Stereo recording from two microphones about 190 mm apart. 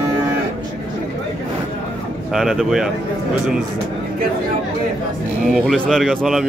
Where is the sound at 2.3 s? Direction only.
Centre (ahead or behind).